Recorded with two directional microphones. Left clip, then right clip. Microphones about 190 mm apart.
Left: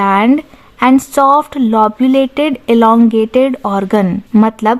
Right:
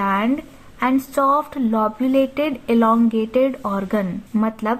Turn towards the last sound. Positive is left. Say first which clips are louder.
# left 10 dB
turn(degrees=35)  # may be behind; listen again after turning